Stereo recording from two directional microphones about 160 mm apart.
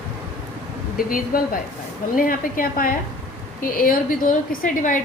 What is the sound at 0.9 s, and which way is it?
A woman's voice, 60° left (ahead or behind).